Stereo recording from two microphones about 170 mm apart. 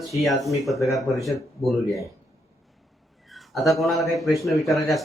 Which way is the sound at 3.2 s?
Centre (ahead or behind).